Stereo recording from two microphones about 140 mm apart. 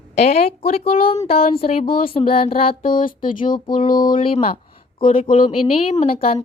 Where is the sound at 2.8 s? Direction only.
85° left.